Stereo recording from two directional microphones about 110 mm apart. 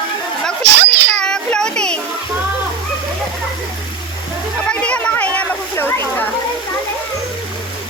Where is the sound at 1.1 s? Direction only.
10° left (ahead or behind).